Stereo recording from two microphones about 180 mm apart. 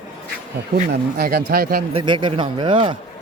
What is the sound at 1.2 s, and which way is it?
Speech, 60° right (ahead or behind).